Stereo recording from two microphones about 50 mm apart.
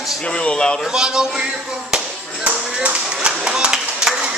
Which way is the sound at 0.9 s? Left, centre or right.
Centre.